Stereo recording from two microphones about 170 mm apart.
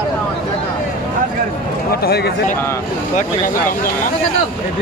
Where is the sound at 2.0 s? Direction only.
70° left (ahead or behind).